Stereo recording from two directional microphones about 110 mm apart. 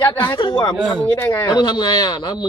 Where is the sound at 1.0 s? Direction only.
15° left (ahead or behind).